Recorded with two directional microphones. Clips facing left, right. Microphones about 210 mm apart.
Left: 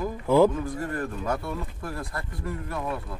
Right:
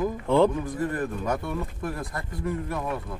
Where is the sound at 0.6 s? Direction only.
20° right (ahead or behind).